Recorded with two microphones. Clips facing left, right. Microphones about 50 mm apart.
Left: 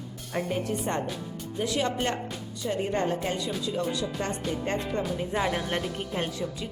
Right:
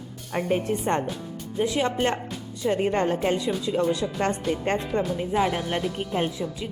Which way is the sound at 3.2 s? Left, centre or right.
Right.